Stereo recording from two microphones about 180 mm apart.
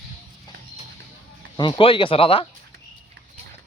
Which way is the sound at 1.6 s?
25° left (ahead or behind).